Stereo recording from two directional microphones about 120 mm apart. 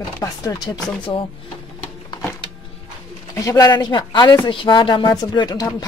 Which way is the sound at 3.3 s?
30° left (ahead or behind).